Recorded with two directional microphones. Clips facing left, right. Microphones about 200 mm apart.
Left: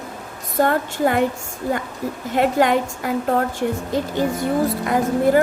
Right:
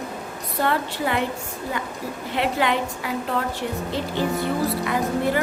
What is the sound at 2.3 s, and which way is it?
Speech, 45° left (ahead or behind).